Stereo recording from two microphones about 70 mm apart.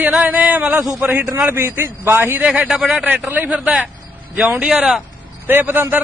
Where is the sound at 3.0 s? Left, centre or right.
Right.